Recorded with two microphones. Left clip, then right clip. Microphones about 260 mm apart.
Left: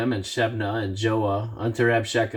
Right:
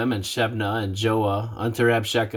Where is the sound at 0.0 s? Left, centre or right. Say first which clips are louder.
Even; right.